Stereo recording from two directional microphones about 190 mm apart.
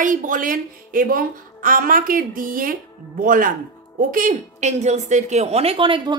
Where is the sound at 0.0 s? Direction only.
45° right (ahead or behind).